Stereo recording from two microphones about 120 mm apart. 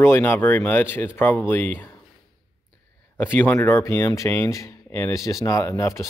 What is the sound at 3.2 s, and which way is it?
Speech, 15° left (ahead or behind).